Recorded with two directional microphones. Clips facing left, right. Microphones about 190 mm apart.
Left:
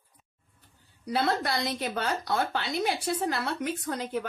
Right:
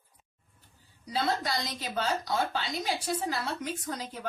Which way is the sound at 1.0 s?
60° left (ahead or behind).